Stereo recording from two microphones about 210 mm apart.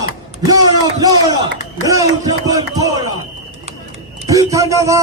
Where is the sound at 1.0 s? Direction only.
20° right (ahead or behind).